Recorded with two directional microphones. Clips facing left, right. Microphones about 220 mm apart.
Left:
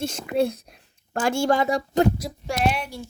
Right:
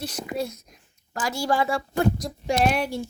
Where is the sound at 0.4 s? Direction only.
30° left (ahead or behind).